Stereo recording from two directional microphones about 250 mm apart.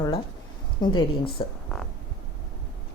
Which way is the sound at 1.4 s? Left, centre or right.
Centre.